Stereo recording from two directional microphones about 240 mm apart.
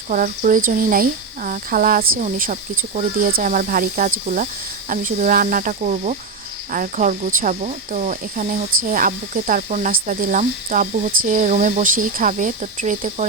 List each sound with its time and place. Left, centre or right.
0.1 s speech: right